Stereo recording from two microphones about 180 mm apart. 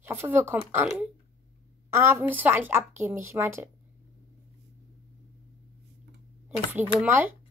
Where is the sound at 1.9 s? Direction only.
15° right (ahead or behind).